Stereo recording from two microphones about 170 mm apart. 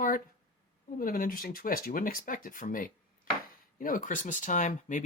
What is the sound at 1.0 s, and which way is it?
Speech, 55° left (ahead or behind).